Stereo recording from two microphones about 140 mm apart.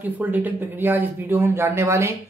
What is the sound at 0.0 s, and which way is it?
Speech, 10° right (ahead or behind).